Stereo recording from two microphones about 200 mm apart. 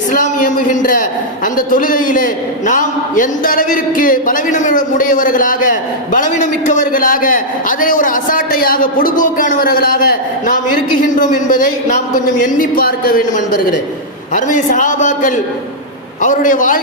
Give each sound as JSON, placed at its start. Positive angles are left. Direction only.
{"t": 0.1, "sound": "a man's voice", "side_deg": 40}
{"t": 14.3, "sound": "a man's voice", "side_deg": 40}